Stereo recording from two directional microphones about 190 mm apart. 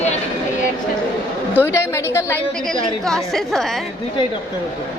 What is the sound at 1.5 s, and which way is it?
Speech, 15° left (ahead or behind).